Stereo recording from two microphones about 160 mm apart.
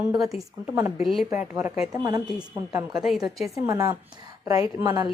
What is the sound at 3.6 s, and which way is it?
Speech, 20° right (ahead or behind).